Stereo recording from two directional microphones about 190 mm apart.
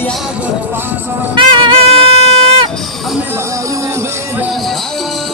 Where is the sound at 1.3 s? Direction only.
25° right (ahead or behind).